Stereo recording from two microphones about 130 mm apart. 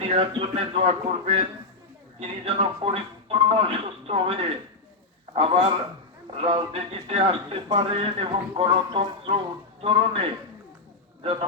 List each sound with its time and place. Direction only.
0.0 s a man's voice: 45° right (ahead or behind)